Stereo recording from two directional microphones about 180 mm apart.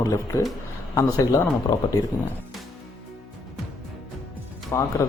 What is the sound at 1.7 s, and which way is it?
Speech, 25° left (ahead or behind).